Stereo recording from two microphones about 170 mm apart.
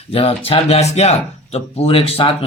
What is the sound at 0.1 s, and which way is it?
Speech, 35° left (ahead or behind).